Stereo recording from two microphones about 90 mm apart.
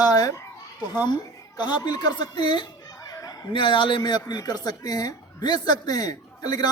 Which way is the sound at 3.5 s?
65° left (ahead or behind).